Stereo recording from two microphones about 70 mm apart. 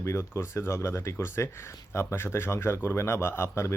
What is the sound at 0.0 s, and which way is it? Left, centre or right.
Speech, left.